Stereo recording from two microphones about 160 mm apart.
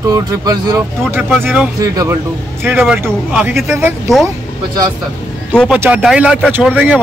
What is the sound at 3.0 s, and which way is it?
Speech, 10° right (ahead or behind).